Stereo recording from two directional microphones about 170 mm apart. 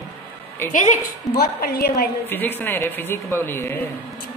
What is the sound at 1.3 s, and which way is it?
Speech, 65° left (ahead or behind).